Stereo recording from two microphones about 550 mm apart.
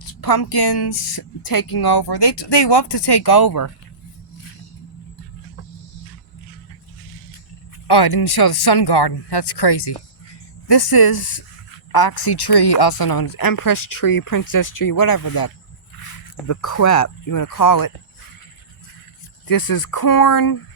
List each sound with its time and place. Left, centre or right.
0.1 s a woman's voice: left
7.9 s a woman's voice: left
19.5 s a woman's voice: left